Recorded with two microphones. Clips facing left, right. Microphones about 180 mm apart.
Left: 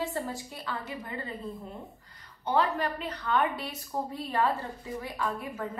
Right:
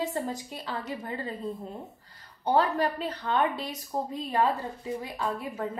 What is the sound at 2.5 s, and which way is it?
A woman's voice, 35° right (ahead or behind).